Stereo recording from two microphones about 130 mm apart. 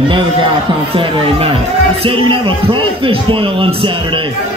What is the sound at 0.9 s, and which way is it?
A man's voice, 40° right (ahead or behind).